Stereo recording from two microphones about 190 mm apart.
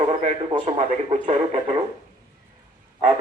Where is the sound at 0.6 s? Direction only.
35° right (ahead or behind).